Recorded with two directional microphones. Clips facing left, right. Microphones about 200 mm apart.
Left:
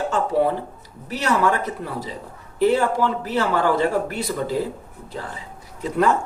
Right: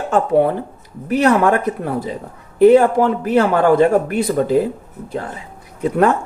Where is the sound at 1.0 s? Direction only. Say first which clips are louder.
Right 7 dB; 55° right (ahead or behind).